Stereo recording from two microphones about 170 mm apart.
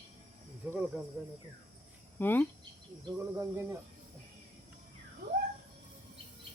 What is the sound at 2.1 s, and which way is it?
Speech, 10° left (ahead or behind).